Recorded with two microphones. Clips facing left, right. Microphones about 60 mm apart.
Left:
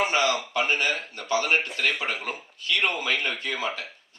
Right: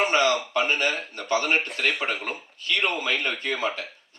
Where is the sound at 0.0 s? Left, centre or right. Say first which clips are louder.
Right 2 dB; right.